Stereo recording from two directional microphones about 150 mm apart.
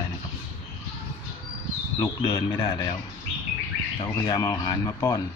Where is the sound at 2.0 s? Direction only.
25° left (ahead or behind).